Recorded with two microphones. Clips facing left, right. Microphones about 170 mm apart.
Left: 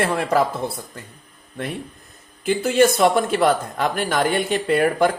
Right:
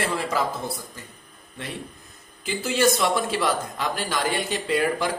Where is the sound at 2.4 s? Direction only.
55° left (ahead or behind).